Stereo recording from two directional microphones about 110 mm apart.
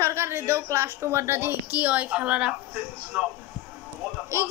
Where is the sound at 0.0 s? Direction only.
25° right (ahead or behind).